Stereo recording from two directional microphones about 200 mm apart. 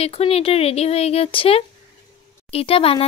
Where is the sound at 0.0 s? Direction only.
30° left (ahead or behind).